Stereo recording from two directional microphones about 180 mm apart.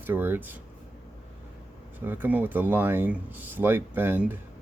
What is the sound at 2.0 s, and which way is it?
Speech, 10° right (ahead or behind).